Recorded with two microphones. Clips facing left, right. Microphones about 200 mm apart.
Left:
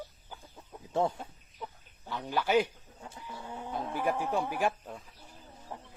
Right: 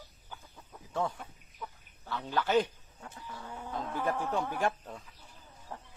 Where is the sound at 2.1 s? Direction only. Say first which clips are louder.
Left 1 dB; 15° left (ahead or behind).